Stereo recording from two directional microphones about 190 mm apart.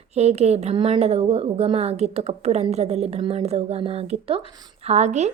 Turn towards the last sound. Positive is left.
turn(degrees=-35)  # may be behind; listen again after turning